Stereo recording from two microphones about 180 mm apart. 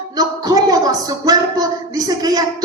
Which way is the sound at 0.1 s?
20° right (ahead or behind).